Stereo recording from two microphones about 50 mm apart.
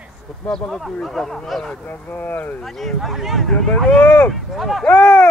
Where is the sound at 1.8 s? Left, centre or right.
Left.